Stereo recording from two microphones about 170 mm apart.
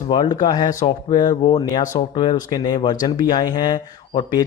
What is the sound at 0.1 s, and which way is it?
Speech, 25° left (ahead or behind).